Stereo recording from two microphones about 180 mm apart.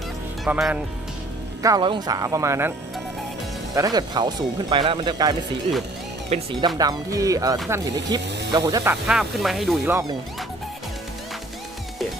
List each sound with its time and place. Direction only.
0.4 s speech: 5° right (ahead or behind)
1.6 s speech: 25° right (ahead or behind)
3.8 s speech: 20° right (ahead or behind)
9.0 s speech: centre (ahead or behind)